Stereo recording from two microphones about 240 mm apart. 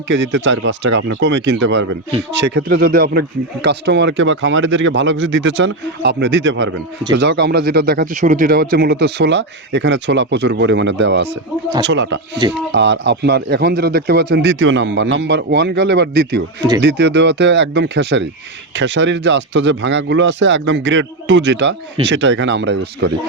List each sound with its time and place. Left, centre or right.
0.1 s speech: right
2.6 s speech: right